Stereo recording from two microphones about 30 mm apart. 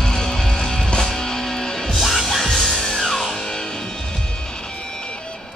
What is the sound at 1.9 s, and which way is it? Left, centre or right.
Music, centre.